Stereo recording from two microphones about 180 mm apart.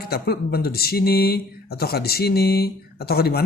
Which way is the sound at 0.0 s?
60° left (ahead or behind).